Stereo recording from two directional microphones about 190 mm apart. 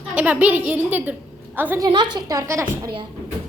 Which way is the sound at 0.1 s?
5° right (ahead or behind).